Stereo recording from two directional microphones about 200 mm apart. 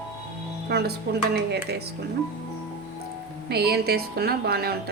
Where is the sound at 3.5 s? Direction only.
55° right (ahead or behind).